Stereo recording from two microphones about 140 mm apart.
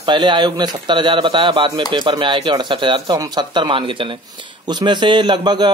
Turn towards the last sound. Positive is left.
turn(degrees=-30)  # may be behind; listen again after turning